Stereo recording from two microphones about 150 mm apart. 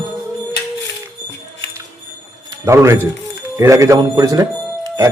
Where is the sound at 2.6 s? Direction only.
20° right (ahead or behind).